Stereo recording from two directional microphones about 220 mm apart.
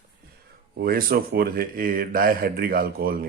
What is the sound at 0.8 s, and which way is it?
A man's voice, 45° right (ahead or behind).